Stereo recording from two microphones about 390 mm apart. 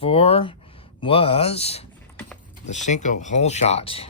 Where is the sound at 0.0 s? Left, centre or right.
Centre.